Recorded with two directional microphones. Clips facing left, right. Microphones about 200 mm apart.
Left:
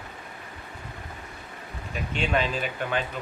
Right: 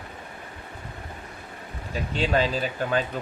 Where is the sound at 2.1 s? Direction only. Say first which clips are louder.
Right 3 dB; 35° right (ahead or behind).